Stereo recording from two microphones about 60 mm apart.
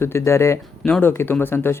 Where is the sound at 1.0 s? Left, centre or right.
Left.